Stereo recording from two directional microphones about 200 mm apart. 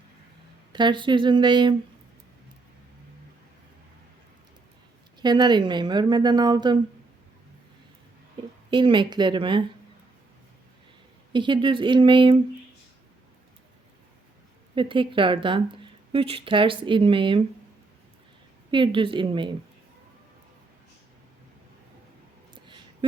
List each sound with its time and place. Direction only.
0.7 s speech: 25° right (ahead or behind)
5.2 s speech: 20° right (ahead or behind)
8.7 s speech: 25° right (ahead or behind)
11.3 s speech: 25° right (ahead or behind)
14.8 s speech: 25° right (ahead or behind)
18.7 s speech: 25° right (ahead or behind)
22.5 s a sound: 25° right (ahead or behind)